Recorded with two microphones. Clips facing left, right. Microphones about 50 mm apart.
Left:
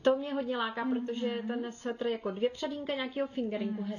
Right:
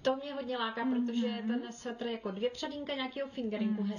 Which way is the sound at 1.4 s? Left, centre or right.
Centre.